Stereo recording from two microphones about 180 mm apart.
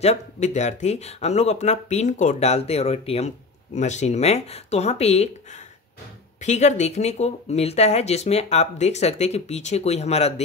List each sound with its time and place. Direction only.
0.0 s speech: 40° left (ahead or behind)
6.4 s speech: 40° left (ahead or behind)